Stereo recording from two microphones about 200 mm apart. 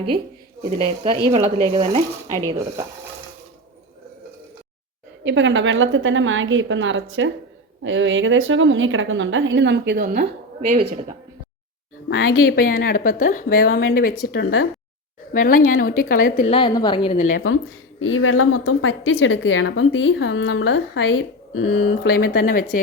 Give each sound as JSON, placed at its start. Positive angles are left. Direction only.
{"t": 0.8, "sound": "speech", "side_deg": -30}
{"t": 5.2, "sound": "a woman's voice", "side_deg": -65}
{"t": 10.6, "sound": "speech", "side_deg": -35}
{"t": 12.0, "sound": "a woman's voice", "side_deg": 60}
{"t": 16.5, "sound": "a woman's voice", "side_deg": 25}
{"t": 17.4, "sound": "a woman's voice", "side_deg": 85}